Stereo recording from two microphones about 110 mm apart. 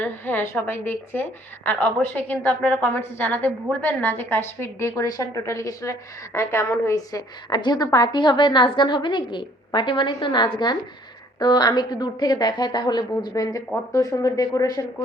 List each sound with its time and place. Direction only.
0.0 s a woman's voice: 15° left (ahead or behind)